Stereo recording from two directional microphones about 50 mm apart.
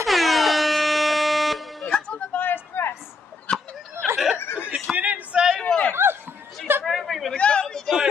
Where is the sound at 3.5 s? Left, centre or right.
Left.